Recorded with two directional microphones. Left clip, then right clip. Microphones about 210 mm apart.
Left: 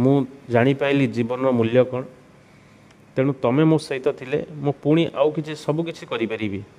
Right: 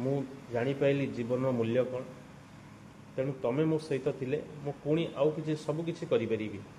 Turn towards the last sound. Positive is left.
turn(degrees=55)  # may be behind; listen again after turning